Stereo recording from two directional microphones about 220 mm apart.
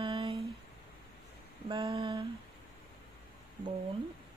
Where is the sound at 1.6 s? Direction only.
25° right (ahead or behind).